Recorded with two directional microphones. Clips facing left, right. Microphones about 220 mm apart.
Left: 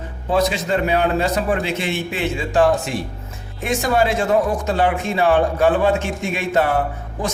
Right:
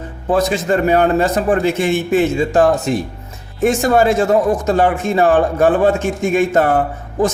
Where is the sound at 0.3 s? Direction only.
50° right (ahead or behind).